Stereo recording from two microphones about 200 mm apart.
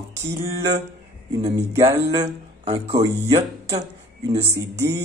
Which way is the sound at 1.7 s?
30° right (ahead or behind).